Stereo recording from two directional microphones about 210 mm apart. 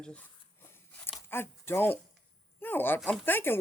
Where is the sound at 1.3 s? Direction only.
10° left (ahead or behind).